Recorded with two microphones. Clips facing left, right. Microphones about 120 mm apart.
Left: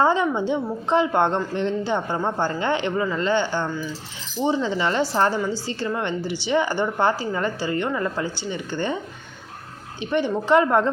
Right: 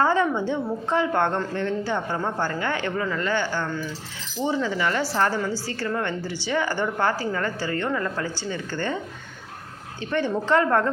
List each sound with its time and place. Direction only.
0.0 s a woman's voice: 20° left (ahead or behind)
10.0 s a woman's voice: 15° left (ahead or behind)